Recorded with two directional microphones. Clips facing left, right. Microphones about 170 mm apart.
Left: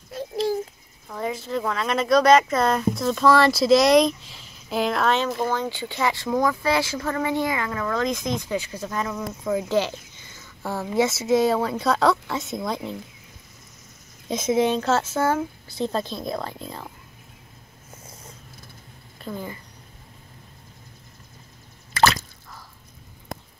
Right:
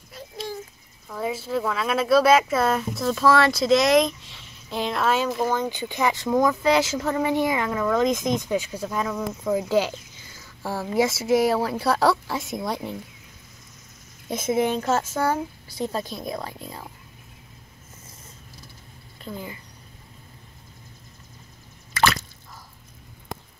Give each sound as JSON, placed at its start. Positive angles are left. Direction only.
{"t": 1.0, "sound": "speech", "side_deg": -5}
{"t": 5.6, "sound": "speech", "side_deg": -15}
{"t": 14.3, "sound": "speech", "side_deg": -10}
{"t": 19.2, "sound": "speech", "side_deg": 40}